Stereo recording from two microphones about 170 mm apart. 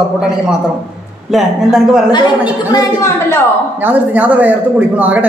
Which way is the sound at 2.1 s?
25° left (ahead or behind).